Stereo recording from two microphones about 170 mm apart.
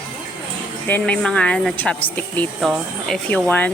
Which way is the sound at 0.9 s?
5° left (ahead or behind).